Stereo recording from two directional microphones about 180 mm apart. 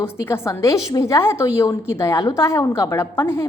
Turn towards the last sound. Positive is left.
turn(degrees=15)  # may be behind; listen again after turning